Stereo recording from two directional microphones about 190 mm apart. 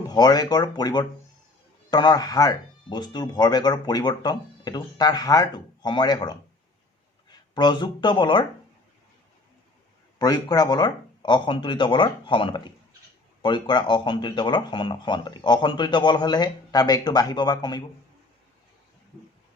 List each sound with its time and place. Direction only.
0.1 s speech: 20° left (ahead or behind)
10.2 s speech: 20° left (ahead or behind)